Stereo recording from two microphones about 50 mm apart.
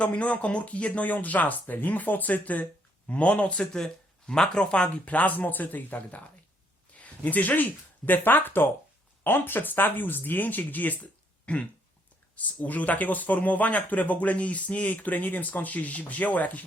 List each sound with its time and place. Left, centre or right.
0.0 s speech: left
5.0 s speech: left
12.6 s speech: left